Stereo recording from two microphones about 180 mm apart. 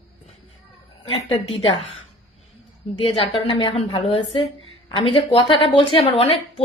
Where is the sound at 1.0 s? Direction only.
30° left (ahead or behind).